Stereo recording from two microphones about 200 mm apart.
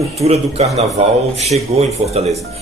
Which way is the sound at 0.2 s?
30° right (ahead or behind).